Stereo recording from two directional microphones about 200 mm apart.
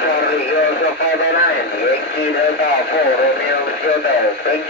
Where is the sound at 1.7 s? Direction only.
50° left (ahead or behind).